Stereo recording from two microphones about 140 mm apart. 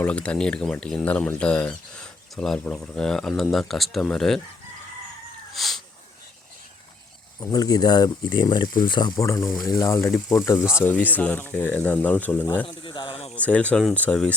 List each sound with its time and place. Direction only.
0.0 s speech: 10° left (ahead or behind)
5.5 s a sound: centre (ahead or behind)
7.3 s speech: 25° left (ahead or behind)
10.8 s speech: 15° left (ahead or behind)
12.6 s a man's voice: 35° left (ahead or behind)
13.3 s speech: 10° left (ahead or behind)